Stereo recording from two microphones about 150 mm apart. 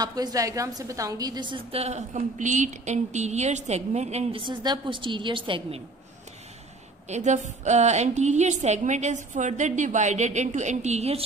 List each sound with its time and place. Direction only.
0.0 s a woman's voice: 25° right (ahead or behind)
7.1 s a woman's voice: 55° right (ahead or behind)